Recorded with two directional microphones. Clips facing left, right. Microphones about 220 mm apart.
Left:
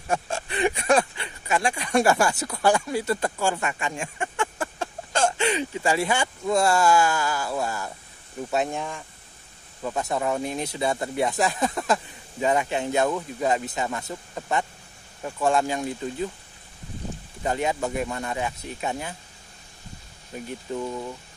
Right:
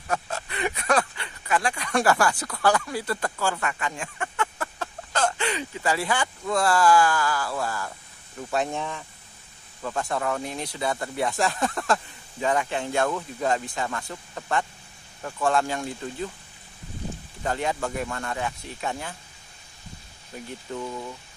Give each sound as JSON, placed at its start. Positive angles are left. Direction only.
{"t": 0.1, "sound": "speech", "side_deg": 30}
{"t": 8.7, "sound": "speech", "side_deg": 0}
{"t": 9.8, "sound": "speech", "side_deg": 15}
{"t": 17.4, "sound": "speech", "side_deg": 15}
{"t": 20.7, "sound": "speech", "side_deg": 15}